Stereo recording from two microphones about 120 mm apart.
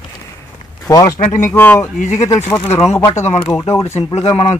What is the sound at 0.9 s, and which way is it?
Speech, 30° left (ahead or behind).